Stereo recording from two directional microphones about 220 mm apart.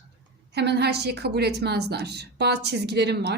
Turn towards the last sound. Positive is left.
turn(degrees=-50)  # may be behind; listen again after turning